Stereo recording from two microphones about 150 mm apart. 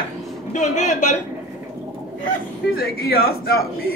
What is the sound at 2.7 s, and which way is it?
Speech, 90° left.